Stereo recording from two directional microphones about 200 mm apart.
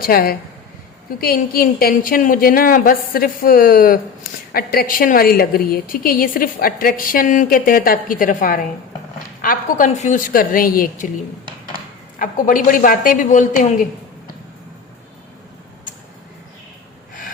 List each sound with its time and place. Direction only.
0.0 s a woman's voice: 50° left (ahead or behind)
12.2 s a woman's voice: 40° left (ahead or behind)